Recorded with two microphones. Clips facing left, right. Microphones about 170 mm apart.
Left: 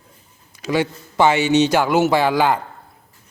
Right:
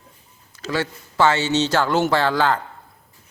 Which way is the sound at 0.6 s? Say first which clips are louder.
Left 4 dB; 15° left (ahead or behind).